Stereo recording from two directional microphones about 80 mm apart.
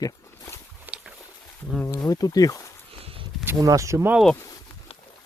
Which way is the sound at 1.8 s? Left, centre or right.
Left.